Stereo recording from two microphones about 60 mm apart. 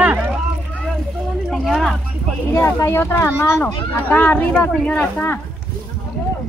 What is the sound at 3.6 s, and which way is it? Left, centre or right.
Speech, left.